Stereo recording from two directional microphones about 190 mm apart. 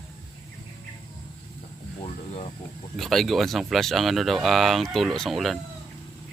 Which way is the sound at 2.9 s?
Centre (ahead or behind).